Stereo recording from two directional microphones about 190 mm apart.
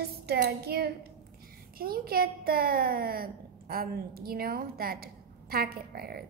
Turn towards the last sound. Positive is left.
turn(degrees=-50)  # may be behind; listen again after turning